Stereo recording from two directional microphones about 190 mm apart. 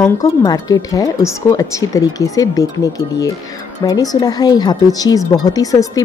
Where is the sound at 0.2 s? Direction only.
20° left (ahead or behind).